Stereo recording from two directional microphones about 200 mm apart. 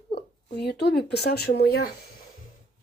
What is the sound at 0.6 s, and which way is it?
Speech, 55° left (ahead or behind).